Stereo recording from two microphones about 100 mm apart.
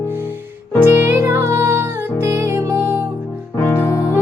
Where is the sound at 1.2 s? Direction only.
25° right (ahead or behind).